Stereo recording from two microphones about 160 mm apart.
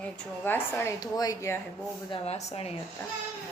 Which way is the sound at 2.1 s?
40° left (ahead or behind).